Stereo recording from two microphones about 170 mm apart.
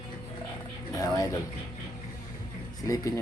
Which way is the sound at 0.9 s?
20° left (ahead or behind).